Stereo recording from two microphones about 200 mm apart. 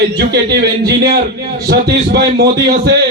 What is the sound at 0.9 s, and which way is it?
A man's voice, 55° right (ahead or behind).